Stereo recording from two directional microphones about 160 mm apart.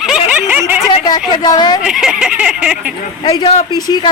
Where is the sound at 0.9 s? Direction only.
25° left (ahead or behind).